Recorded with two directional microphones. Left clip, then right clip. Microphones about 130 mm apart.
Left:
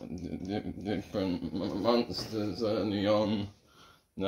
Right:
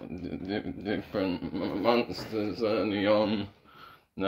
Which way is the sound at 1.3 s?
45° right (ahead or behind).